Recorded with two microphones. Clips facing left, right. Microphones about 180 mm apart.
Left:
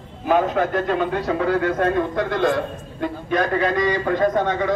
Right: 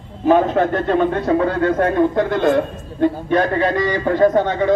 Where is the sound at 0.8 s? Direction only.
45° right (ahead or behind).